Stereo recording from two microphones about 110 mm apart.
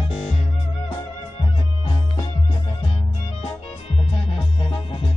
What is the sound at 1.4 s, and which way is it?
Music, 50° left (ahead or behind).